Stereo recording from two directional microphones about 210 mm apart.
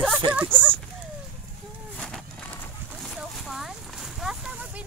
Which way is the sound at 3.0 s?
Centre (ahead or behind).